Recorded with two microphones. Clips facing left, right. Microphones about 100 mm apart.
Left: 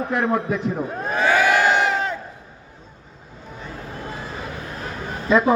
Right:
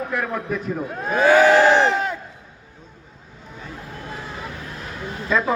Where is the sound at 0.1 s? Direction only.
25° left (ahead or behind).